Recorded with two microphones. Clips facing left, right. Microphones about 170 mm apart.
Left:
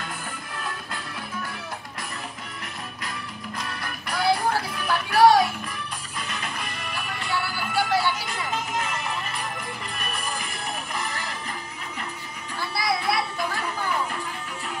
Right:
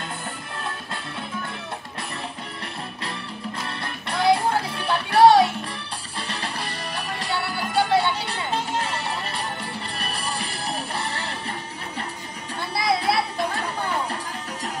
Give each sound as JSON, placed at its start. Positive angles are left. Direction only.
{"t": 3.6, "sound": "music", "side_deg": -30}
{"t": 12.5, "sound": "music", "side_deg": -25}